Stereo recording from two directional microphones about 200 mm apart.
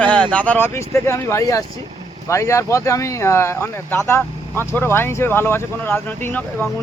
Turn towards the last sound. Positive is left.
turn(degrees=10)  # may be behind; listen again after turning